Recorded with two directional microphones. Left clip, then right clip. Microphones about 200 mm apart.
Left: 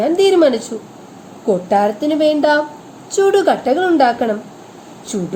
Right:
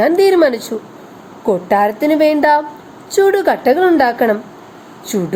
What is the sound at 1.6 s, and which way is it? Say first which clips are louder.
A woman's voice: right 3 dB; 30° right (ahead or behind).